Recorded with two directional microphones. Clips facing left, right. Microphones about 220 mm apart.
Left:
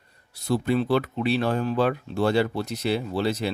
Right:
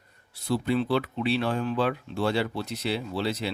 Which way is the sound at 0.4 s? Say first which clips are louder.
Left 2 dB; 50° left (ahead or behind).